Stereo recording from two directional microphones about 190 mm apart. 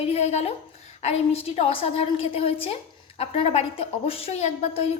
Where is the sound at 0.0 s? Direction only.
35° left (ahead or behind).